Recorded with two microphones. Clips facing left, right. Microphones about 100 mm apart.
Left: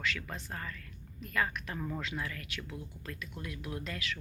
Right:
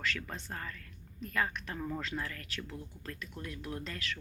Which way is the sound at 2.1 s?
10° left (ahead or behind).